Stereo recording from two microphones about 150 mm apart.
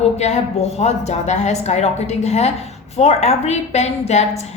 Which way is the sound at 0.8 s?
50° left (ahead or behind).